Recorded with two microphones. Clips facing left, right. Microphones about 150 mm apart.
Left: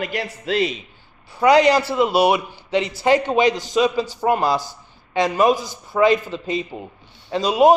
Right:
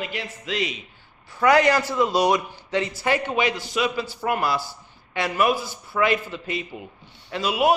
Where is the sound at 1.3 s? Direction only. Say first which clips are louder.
Left 4 dB; 15° left (ahead or behind).